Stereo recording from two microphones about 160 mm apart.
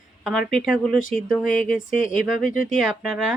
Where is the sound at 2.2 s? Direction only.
Centre (ahead or behind).